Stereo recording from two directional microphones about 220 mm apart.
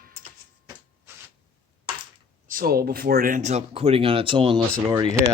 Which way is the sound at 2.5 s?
40° right (ahead or behind).